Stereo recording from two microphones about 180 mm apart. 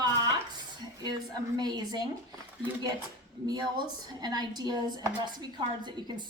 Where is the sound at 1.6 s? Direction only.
25° right (ahead or behind).